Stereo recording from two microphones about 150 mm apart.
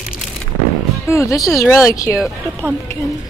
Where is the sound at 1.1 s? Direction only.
20° left (ahead or behind).